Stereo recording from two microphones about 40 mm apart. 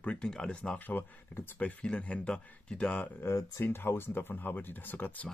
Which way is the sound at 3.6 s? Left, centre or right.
Left.